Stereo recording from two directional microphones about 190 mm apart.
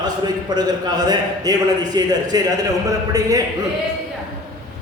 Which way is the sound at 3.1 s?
20° right (ahead or behind).